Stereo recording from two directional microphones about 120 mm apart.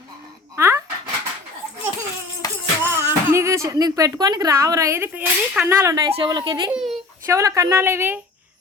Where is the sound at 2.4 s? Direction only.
30° left (ahead or behind).